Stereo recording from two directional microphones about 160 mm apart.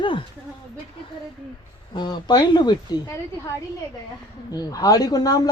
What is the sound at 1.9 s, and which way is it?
A man's voice, 25° left (ahead or behind).